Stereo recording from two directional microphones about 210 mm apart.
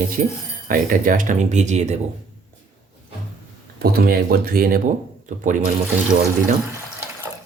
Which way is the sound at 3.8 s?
50° right (ahead or behind).